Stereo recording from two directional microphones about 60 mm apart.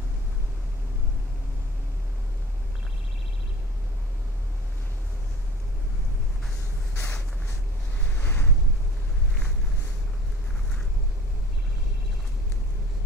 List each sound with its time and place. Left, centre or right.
6.9 s vehicle: left
8.0 s boat: left